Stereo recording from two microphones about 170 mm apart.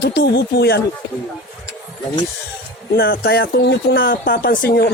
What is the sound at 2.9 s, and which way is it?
Speech, 70° left (ahead or behind).